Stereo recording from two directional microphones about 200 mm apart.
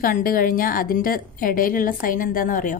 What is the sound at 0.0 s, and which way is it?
A woman's voice, 45° left (ahead or behind).